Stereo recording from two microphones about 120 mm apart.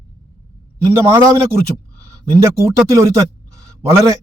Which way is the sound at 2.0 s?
25° right (ahead or behind).